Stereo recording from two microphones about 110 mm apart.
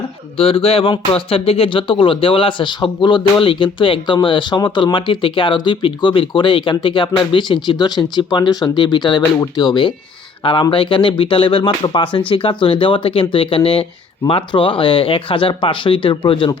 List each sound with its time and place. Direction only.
0.3 s speech: 60° left (ahead or behind)